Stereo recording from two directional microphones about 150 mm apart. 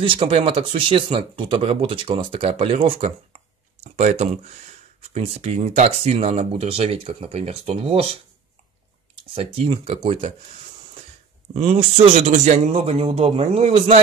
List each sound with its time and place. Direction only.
0.0 s speech: 35° right (ahead or behind)
9.3 s speech: 40° right (ahead or behind)
11.5 s speech: 40° right (ahead or behind)